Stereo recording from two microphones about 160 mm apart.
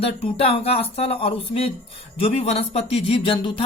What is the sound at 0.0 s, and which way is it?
Speech, 40° left (ahead or behind).